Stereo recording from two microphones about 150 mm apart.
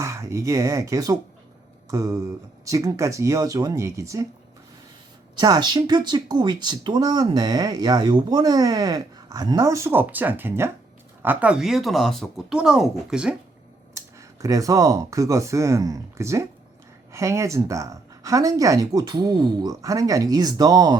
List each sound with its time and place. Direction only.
0.0 s speech: 20° right (ahead or behind)
5.4 s speech: 30° right (ahead or behind); by 13.3 s 5° right (ahead or behind)
13.9 s speech: 20° right (ahead or behind)